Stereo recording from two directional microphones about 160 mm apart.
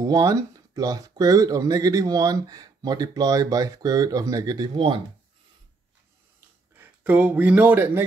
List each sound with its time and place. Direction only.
0.0 s speech: 20° right (ahead or behind)
6.8 s speech: 10° right (ahead or behind)